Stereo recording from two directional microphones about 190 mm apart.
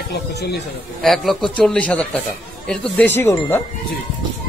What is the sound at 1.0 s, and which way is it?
Speech, centre (ahead or behind).